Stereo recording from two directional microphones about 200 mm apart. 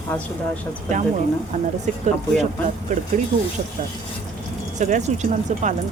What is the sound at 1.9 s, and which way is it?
Speech, 35° right (ahead or behind).